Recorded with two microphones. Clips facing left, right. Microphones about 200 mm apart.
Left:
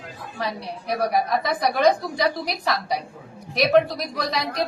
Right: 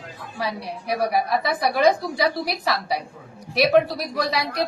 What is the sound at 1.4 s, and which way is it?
A woman's voice, 5° right (ahead or behind).